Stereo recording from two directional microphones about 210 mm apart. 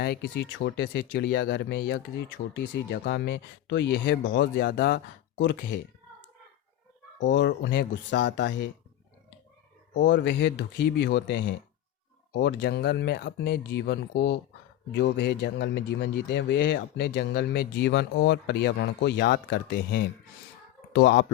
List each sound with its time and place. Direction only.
0.0 s speech: 50° left (ahead or behind)
7.2 s speech: 60° left (ahead or behind)
9.9 s speech: 60° left (ahead or behind)